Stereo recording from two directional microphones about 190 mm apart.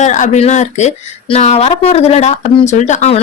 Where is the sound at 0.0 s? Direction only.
40° left (ahead or behind).